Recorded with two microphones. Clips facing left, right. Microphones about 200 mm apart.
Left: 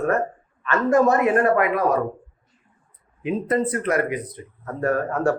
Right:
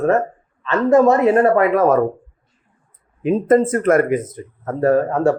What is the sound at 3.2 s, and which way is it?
Speech, 50° right (ahead or behind).